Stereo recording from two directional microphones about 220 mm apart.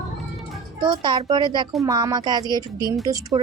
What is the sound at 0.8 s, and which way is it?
Speech, 20° right (ahead or behind).